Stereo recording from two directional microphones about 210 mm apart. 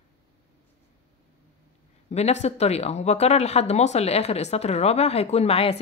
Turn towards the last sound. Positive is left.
turn(degrees=30)  # may be behind; listen again after turning